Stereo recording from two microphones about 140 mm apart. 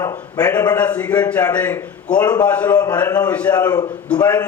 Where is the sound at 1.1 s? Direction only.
25° left (ahead or behind).